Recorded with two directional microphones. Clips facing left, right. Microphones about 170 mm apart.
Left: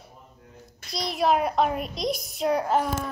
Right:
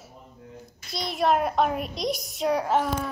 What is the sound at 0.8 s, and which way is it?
A child's voice, centre (ahead or behind).